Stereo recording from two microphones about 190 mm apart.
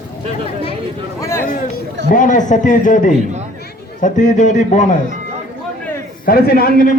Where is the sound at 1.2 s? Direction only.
15° left (ahead or behind).